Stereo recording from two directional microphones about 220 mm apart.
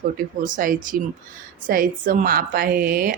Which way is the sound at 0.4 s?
40° right (ahead or behind).